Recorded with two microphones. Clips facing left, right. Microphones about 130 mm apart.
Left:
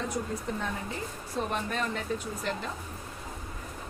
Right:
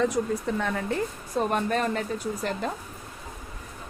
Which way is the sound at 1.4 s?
50° right (ahead or behind).